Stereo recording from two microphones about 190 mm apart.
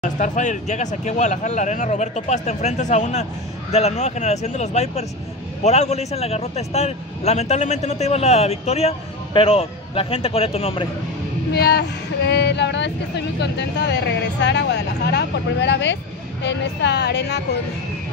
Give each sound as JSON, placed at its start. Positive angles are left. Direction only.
{"t": 0.0, "sound": "a man's voice", "side_deg": 40}
{"t": 11.5, "sound": "speech", "side_deg": 60}